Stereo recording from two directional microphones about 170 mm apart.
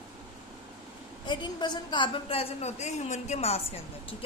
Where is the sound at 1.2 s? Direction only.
25° left (ahead or behind).